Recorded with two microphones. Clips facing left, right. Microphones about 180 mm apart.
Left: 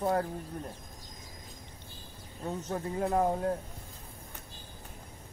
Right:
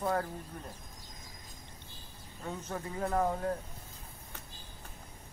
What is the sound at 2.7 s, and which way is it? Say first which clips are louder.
Speech: left 4 dB; 20° left (ahead or behind).